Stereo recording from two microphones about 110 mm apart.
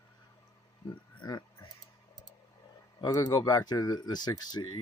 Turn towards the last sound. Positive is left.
turn(degrees=40)  # may be behind; listen again after turning